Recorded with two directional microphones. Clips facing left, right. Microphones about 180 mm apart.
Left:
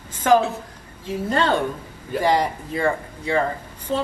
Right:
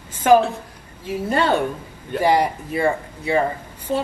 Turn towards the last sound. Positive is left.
turn(degrees=-10)  # may be behind; listen again after turning